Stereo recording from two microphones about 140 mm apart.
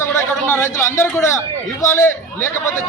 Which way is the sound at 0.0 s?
15° left (ahead or behind).